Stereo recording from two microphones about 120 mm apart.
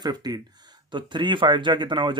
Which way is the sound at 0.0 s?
35° right (ahead or behind).